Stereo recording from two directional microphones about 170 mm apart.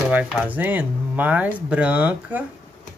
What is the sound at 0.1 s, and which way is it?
Speech, 10° right (ahead or behind).